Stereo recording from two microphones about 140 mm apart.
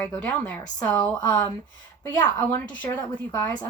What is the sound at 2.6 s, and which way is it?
Speech, 35° left (ahead or behind).